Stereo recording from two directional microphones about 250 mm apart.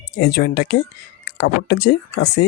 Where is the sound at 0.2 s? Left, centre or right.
Left.